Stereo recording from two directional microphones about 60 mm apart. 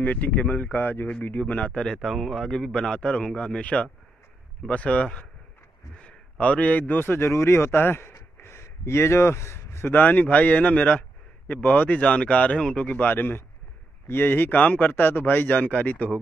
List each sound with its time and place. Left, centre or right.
0.0 s speech: left
1.7 s a man's voice: centre; by 7.1 s left
7.1 s speech: left
7.8 s speech: left
8.1 s a sound: left
9.9 s a man's voice: left
12.0 s a man's voice: centre; by 14.6 s left
14.6 s speech: left